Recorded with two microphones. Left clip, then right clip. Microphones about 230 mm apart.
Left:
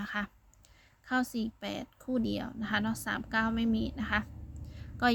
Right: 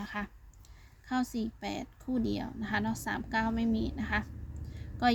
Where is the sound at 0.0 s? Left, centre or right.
Left.